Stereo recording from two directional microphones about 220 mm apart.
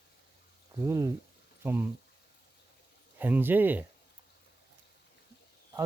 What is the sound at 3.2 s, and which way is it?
Speech, 10° right (ahead or behind).